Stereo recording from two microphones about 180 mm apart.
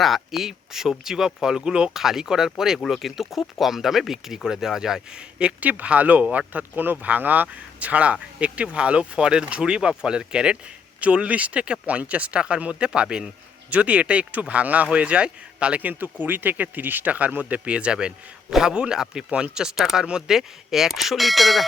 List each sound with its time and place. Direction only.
0.0 s speech: centre (ahead or behind)